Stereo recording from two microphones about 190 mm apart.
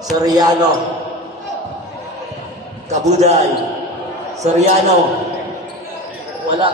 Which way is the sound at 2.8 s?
35° right (ahead or behind).